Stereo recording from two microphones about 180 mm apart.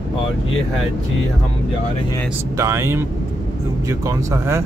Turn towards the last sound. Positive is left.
turn(degrees=-15)  # may be behind; listen again after turning